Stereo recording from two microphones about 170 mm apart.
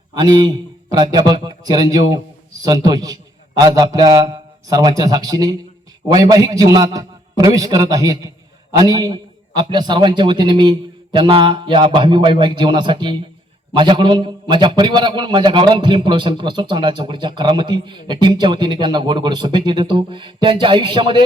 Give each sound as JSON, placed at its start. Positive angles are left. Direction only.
{"t": 0.1, "sound": "a man's voice", "side_deg": -25}